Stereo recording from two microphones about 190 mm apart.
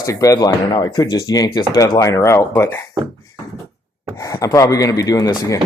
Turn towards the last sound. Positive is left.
turn(degrees=15)  # may be behind; listen again after turning